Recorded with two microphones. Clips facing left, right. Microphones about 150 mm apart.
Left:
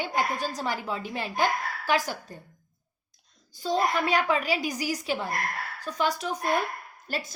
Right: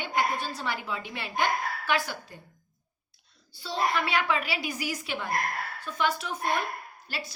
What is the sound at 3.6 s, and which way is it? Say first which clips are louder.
A woman's voice: left 3 dB; 45° left (ahead or behind).